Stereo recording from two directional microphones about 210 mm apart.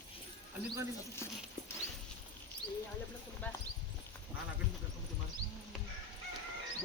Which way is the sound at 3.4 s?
10° left (ahead or behind).